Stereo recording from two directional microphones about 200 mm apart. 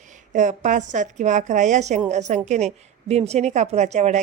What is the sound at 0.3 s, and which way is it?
A woman's voice, 40° right (ahead or behind).